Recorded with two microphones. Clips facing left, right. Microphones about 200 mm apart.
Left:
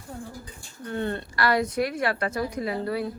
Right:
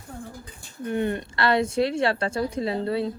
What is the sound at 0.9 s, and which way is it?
A woman's voice, 15° right (ahead or behind).